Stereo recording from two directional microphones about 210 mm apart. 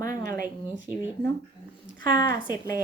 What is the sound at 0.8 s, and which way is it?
Speech, 10° right (ahead or behind).